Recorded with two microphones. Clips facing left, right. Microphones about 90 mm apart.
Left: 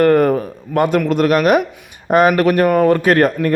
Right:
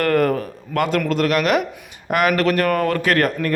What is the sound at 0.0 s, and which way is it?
Speech, 25° left (ahead or behind).